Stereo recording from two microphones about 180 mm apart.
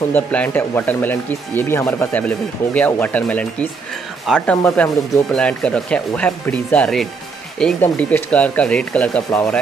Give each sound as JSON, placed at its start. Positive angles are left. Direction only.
{"t": 0.1, "sound": "speech", "side_deg": 10}